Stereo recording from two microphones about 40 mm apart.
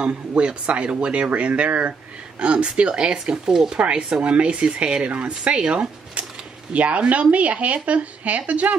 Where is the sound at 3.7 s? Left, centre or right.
Right.